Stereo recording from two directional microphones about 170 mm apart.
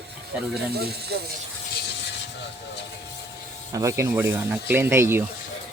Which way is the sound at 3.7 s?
20° right (ahead or behind).